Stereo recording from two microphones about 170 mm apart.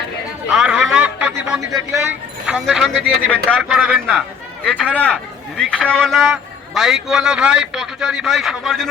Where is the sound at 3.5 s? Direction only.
5° right (ahead or behind).